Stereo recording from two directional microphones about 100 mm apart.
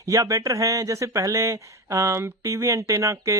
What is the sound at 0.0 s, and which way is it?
Speech, 35° right (ahead or behind).